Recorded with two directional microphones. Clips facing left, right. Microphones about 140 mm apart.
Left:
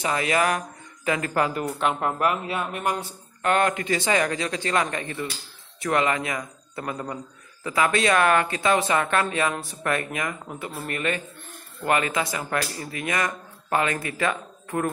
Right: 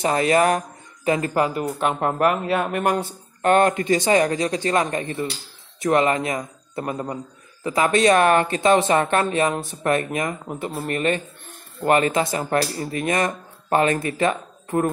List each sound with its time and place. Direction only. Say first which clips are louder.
0.0 s speech: right 5 dB; 35° right (ahead or behind); by 3.0 s 60° right (ahead or behind)
3.4 s speech: right 5 dB; 35° right (ahead or behind)